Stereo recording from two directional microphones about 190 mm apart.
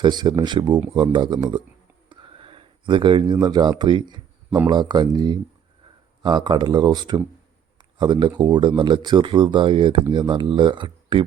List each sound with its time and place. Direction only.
0.0 s speech: 25° right (ahead or behind)
7.8 s a sound: 25° right (ahead or behind)
8.4 s speech: 25° right (ahead or behind)